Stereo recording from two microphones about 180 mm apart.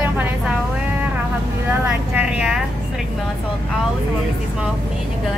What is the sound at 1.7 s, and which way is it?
Vehicle, 5° right (ahead or behind).